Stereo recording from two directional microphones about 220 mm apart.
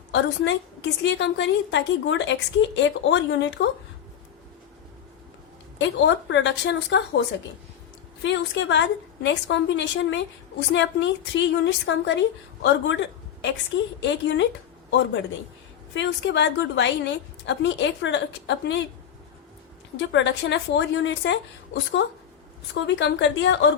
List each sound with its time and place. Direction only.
0.1 s a woman's voice: 55° left (ahead or behind)
5.8 s a woman's voice: 55° left (ahead or behind)
8.2 s a woman's voice: 55° left (ahead or behind)
20.0 s a woman's voice: 55° left (ahead or behind)
22.7 s a woman's voice: 55° left (ahead or behind)